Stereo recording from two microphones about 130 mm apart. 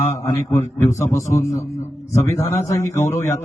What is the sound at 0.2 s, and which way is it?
A man's voice, 25° left (ahead or behind).